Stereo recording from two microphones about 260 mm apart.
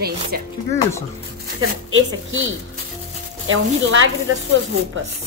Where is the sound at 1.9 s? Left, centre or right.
Right.